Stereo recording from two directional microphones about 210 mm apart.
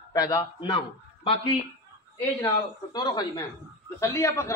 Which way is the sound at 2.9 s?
20° left (ahead or behind).